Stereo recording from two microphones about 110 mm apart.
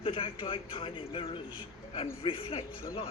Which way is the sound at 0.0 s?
50° left (ahead or behind).